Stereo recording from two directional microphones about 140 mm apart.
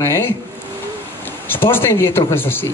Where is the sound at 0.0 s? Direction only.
20° left (ahead or behind).